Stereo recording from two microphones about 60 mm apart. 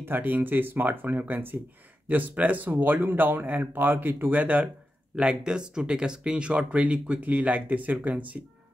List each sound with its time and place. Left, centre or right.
0.0 s speech: right
5.1 s speech: centre